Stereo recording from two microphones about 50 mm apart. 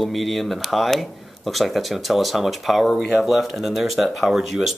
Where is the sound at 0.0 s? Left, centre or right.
Centre.